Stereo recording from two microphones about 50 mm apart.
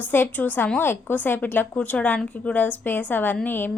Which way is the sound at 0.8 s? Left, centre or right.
Left.